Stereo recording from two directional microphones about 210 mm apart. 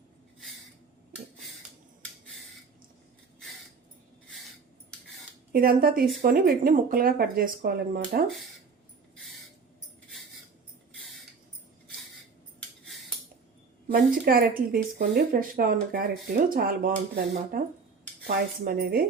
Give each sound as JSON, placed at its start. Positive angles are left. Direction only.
{"t": 5.5, "sound": "speech", "side_deg": -45}
{"t": 13.8, "sound": "speech", "side_deg": -45}